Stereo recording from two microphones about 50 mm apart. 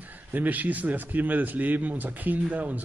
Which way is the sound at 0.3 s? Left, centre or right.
Right.